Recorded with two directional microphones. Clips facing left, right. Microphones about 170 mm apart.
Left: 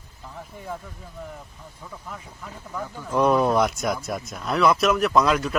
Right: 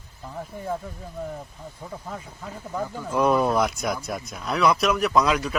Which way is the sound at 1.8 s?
40° right (ahead or behind).